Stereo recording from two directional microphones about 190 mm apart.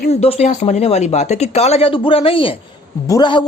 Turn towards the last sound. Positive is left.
turn(degrees=25)  # may be behind; listen again after turning